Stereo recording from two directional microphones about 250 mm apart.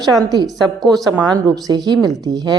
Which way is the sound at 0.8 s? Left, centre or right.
Centre.